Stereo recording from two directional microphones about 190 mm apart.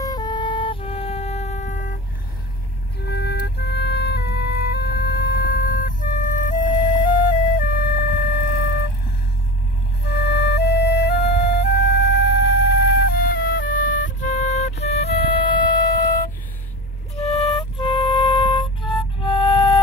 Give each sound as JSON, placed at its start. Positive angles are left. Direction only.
{"t": 0.0, "sound": "music", "side_deg": 20}
{"t": 3.1, "sound": "music", "side_deg": 60}
{"t": 10.2, "sound": "music", "side_deg": 65}
{"t": 15.4, "sound": "siren", "side_deg": 25}
{"t": 15.9, "sound": "music", "side_deg": 50}
{"t": 17.3, "sound": "music", "side_deg": 30}